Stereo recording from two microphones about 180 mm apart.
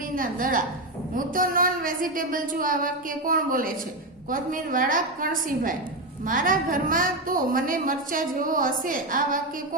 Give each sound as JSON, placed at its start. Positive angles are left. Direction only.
{"t": 0.2, "sound": "a woman's voice", "side_deg": -50}